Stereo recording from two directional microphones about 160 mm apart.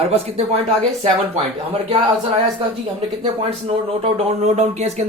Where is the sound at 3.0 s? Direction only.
35° right (ahead or behind).